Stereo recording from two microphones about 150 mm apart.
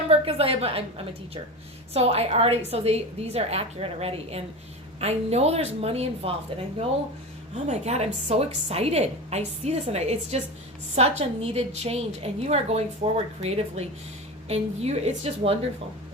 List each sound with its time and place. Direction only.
0.1 s a woman's voice: 40° right (ahead or behind)
7.7 s a woman's voice: 45° right (ahead or behind)